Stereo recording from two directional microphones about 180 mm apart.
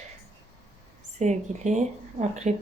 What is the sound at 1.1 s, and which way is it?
Speech, 40° right (ahead or behind).